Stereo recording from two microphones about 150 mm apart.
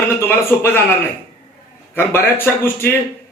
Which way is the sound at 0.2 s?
15° left (ahead or behind).